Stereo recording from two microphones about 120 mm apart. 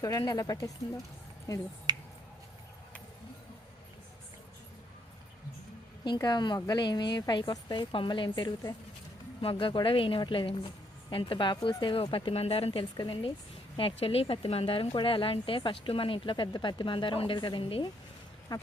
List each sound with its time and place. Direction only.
0.0 s speech: 25° left (ahead or behind)
1.9 s finger snapping: 35° right (ahead or behind)
6.1 s a woman's voice: 35° left (ahead or behind)
18.5 s speech: 35° left (ahead or behind)